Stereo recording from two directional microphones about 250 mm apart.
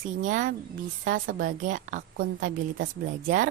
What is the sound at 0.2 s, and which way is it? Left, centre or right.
Speech, right.